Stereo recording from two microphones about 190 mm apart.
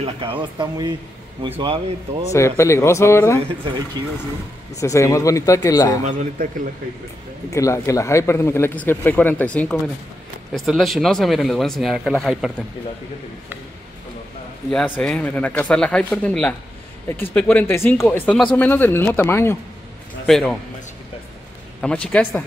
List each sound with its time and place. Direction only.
0.0 s speech: 30° right (ahead or behind)
2.3 s speech: 15° left (ahead or behind)
4.7 s speech: 15° left (ahead or behind)
6.0 s a man's voice: 45° right (ahead or behind)
7.5 s speech: 15° left (ahead or behind); by 12.6 s centre (ahead or behind)
15.0 s speech: 5° left (ahead or behind)
20.2 s speech: centre (ahead or behind)
21.8 s speech: 5° left (ahead or behind)